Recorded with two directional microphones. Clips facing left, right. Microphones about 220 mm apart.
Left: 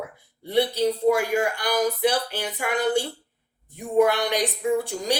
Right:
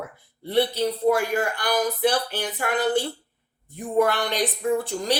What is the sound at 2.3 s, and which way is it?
Speech, 10° left (ahead or behind).